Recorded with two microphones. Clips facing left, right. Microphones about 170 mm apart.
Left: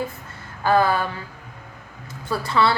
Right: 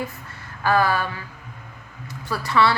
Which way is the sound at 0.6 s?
25° left (ahead or behind).